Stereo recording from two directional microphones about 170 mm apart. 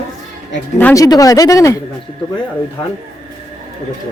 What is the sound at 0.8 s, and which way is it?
Speech, 15° left (ahead or behind).